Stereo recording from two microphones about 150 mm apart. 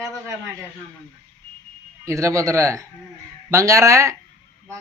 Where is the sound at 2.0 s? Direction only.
20° right (ahead or behind).